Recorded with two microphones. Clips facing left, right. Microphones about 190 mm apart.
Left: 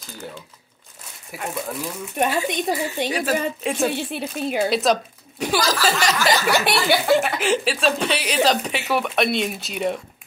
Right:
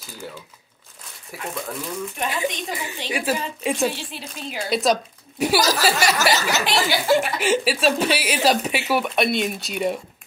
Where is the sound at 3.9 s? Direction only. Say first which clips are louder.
Left 4 dB; 60° left (ahead or behind).